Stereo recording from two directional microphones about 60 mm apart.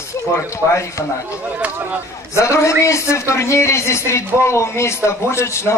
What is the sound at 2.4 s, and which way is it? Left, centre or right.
A man's voice, left.